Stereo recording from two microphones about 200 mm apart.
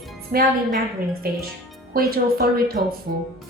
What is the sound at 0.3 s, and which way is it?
Speech, 45° right (ahead or behind).